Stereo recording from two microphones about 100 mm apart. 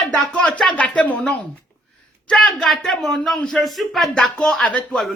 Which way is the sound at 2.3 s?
5° left (ahead or behind).